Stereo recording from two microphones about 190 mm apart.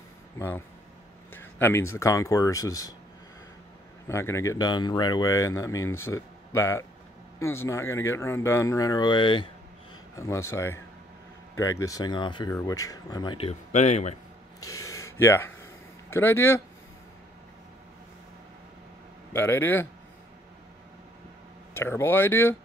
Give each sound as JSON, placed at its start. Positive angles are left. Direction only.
{"t": 0.4, "sound": "speech", "side_deg": 10}
{"t": 4.1, "sound": "speech", "side_deg": 15}
{"t": 14.7, "sound": "a sound", "side_deg": 15}
{"t": 16.1, "sound": "speech", "side_deg": 10}
{"t": 19.3, "sound": "speech", "side_deg": 10}
{"t": 21.7, "sound": "speech", "side_deg": 10}